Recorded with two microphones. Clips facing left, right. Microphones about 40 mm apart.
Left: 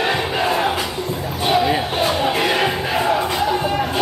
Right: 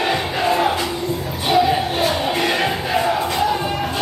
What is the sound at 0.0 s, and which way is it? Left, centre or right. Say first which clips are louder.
Crowd: even; centre.